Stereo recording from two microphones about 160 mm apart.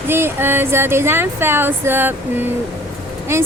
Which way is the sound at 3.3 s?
15° right (ahead or behind).